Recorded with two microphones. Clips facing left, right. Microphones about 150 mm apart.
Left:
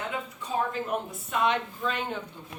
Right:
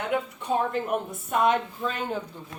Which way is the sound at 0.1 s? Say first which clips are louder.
Right 6 dB; 60° right (ahead or behind).